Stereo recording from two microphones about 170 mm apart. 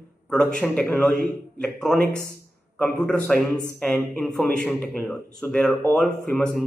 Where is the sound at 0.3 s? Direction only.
5° left (ahead or behind).